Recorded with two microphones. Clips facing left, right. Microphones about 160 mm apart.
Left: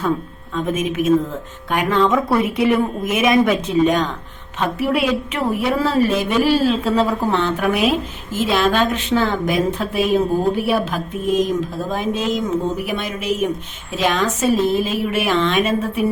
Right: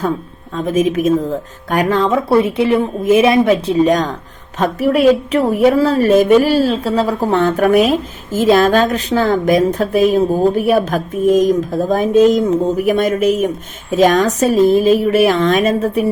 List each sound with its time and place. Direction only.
0.5 s a woman's voice: 35° right (ahead or behind)